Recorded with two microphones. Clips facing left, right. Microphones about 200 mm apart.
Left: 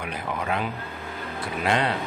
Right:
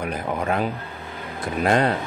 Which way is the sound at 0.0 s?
45° right (ahead or behind).